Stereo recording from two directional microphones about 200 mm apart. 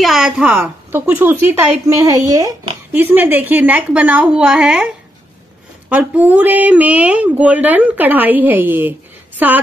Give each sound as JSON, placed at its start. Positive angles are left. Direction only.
{"t": 0.0, "sound": "a woman's voice", "side_deg": 0}
{"t": 5.9, "sound": "a woman's voice", "side_deg": -10}